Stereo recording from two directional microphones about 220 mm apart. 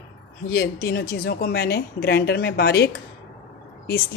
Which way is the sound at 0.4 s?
45° left (ahead or behind).